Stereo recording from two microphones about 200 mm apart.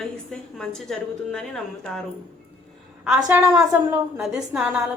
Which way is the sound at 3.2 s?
15° right (ahead or behind).